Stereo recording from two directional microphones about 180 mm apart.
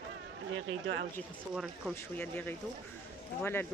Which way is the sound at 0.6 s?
90° right.